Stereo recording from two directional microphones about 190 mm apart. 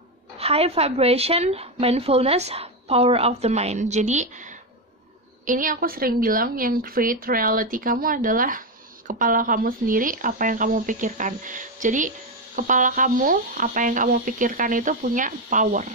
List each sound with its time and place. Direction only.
0.4 s a woman's voice: 30° right (ahead or behind)